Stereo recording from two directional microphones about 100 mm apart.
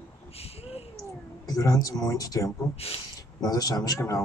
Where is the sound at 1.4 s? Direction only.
35° left (ahead or behind).